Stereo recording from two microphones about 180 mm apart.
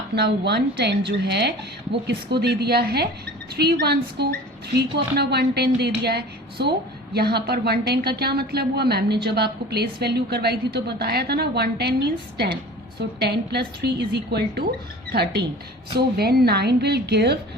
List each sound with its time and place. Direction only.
0.2 s a woman's voice: 70° right (ahead or behind)